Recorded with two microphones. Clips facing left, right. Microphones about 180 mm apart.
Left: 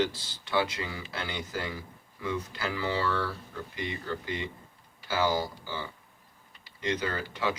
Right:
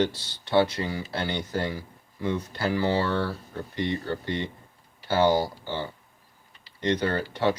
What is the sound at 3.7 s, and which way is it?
Speech, 10° left (ahead or behind).